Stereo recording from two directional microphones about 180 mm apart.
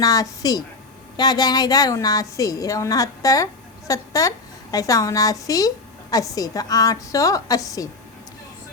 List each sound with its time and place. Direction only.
0.0 s a woman's voice: 20° left (ahead or behind)